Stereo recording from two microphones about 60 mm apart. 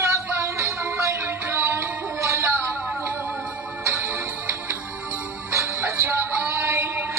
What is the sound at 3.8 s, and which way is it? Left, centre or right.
Music, right.